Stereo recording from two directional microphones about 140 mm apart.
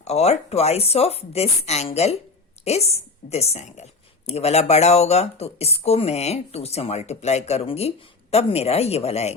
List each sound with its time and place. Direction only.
0.0 s speech: 50° left (ahead or behind)